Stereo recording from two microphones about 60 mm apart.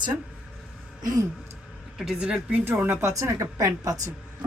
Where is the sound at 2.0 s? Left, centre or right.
Centre.